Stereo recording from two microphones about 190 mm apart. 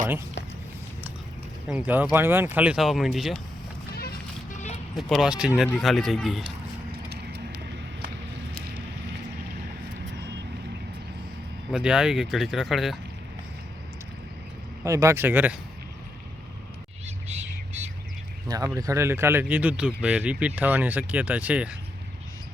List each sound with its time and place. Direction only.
1.6 s speech: 5° right (ahead or behind)
4.5 s a sound: 40° left (ahead or behind)
4.9 s speech: centre (ahead or behind)
6.9 s vehicle: 60° right (ahead or behind)
11.7 s speech: 5° right (ahead or behind)
14.8 s speech: 15° right (ahead or behind)
17.2 s bird: 35° right (ahead or behind)
18.4 s speech: 20° right (ahead or behind)